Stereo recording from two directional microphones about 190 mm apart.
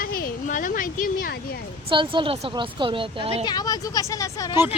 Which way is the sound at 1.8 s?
25° right (ahead or behind).